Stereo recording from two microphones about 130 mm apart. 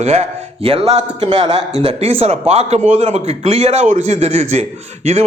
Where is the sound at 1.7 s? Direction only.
50° right (ahead or behind).